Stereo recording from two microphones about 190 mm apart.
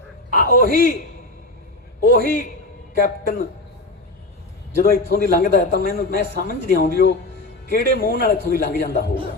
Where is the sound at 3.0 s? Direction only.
45° left (ahead or behind).